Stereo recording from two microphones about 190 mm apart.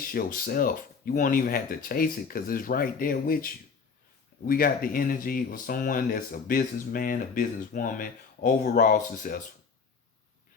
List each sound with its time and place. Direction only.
0.1 s speech: 50° left (ahead or behind)